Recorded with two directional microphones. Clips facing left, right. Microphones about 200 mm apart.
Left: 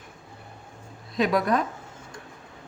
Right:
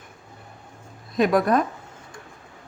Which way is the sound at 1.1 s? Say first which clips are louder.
Right 4 dB; 50° right (ahead or behind).